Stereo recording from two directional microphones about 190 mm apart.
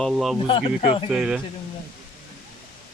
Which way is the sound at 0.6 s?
35° left (ahead or behind).